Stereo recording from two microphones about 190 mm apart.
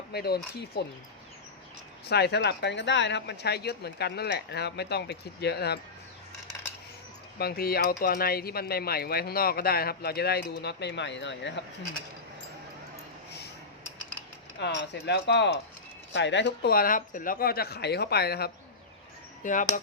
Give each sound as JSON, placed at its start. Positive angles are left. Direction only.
{"t": 0.1, "sound": "speech", "side_deg": 55}
{"t": 2.0, "sound": "speech", "side_deg": 60}
{"t": 7.3, "sound": "speech", "side_deg": 55}
{"t": 14.6, "sound": "speech", "side_deg": 65}
{"t": 19.4, "sound": "speech", "side_deg": 40}